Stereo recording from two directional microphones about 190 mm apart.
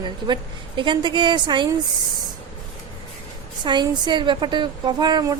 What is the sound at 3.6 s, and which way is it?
A woman's voice, 25° right (ahead or behind).